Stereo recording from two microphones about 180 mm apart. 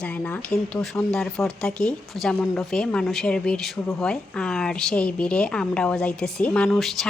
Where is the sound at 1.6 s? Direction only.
5° left (ahead or behind).